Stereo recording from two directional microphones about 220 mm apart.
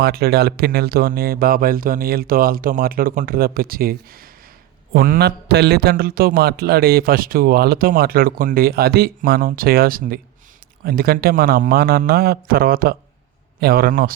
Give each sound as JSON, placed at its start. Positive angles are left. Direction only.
{"t": 0.0, "sound": "a man's voice", "side_deg": -45}